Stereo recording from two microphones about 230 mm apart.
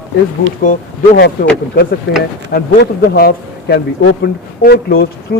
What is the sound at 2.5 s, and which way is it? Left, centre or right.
A man's voice, left.